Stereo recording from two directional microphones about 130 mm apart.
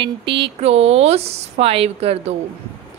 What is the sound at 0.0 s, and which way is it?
Speech, 40° right (ahead or behind).